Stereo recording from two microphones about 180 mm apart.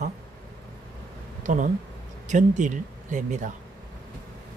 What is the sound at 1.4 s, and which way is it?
Speech, 45° right (ahead or behind).